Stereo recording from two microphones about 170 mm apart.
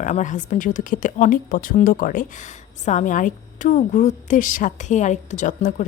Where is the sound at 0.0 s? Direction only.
45° left (ahead or behind).